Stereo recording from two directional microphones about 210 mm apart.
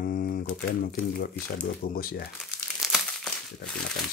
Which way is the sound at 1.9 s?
45° left (ahead or behind).